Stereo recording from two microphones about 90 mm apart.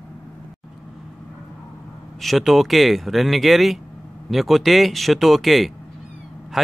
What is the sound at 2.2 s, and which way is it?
Speech, centre (ahead or behind).